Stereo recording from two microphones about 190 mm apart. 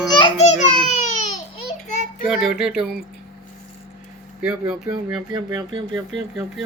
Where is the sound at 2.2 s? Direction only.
Centre (ahead or behind).